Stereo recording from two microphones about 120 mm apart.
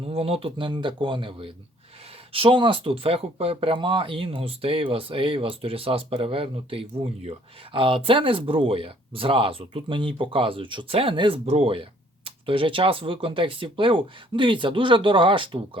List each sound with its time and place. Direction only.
0.0 s speech: 55° right (ahead or behind)
11.4 s speech: 60° right (ahead or behind)